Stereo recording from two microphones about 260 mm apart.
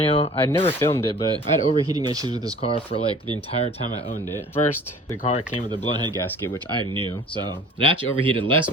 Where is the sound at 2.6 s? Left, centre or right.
Left.